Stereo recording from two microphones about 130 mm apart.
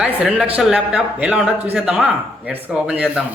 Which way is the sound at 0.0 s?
5° right (ahead or behind).